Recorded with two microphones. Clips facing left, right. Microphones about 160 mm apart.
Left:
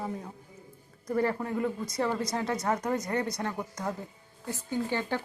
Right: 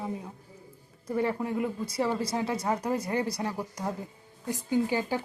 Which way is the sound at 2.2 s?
30° right (ahead or behind).